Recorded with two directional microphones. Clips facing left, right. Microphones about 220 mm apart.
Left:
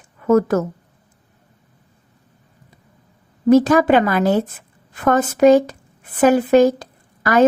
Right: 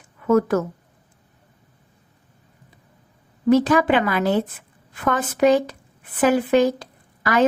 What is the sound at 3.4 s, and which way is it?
A woman's voice, 45° left (ahead or behind).